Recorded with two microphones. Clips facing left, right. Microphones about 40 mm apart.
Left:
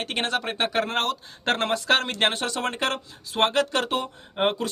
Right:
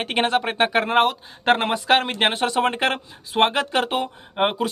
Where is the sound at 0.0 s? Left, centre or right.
Centre.